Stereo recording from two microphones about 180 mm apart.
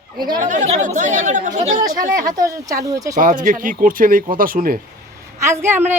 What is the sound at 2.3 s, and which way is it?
Speech, 20° right (ahead or behind).